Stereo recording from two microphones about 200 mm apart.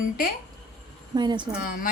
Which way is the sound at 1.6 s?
45° left (ahead or behind).